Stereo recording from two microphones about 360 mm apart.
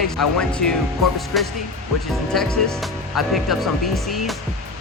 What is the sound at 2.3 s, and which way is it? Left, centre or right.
Speech, centre.